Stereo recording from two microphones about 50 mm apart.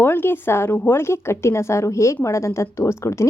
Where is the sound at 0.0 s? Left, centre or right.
Left.